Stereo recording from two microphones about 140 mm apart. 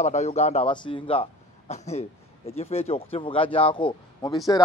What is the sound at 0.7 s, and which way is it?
A man's voice, 35° left (ahead or behind).